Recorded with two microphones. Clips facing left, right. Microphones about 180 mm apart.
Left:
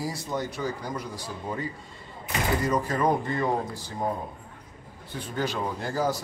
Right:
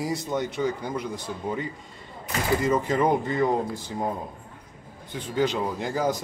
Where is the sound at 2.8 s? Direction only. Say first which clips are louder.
Right 2 dB; 20° right (ahead or behind).